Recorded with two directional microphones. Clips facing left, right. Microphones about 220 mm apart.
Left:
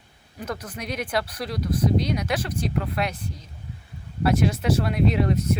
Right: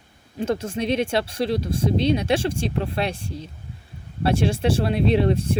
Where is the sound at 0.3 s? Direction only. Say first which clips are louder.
Right 9 dB; 25° right (ahead or behind).